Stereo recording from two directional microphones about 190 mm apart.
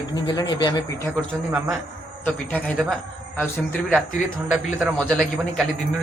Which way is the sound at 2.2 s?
5° left (ahead or behind).